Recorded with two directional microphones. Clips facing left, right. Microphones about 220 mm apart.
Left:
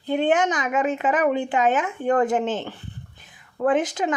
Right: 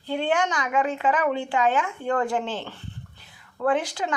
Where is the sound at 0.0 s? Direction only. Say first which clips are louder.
Left 4 dB; 20° left (ahead or behind).